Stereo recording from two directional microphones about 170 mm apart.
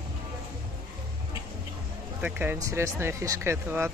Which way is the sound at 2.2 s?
10° right (ahead or behind).